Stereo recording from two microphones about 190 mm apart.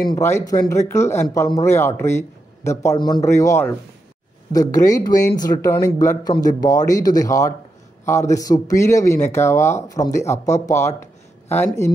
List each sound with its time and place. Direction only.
0.1 s speech: 15° left (ahead or behind)